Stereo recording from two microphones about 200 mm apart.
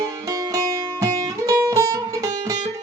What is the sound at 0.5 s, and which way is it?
Music, 15° right (ahead or behind).